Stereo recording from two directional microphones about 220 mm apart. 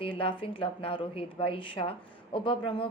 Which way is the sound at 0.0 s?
25° left (ahead or behind).